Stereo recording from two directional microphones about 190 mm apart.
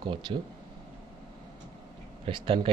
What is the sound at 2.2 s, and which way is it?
Speech, 30° right (ahead or behind).